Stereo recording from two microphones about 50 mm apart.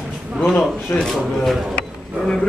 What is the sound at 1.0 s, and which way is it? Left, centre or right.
Speech, centre.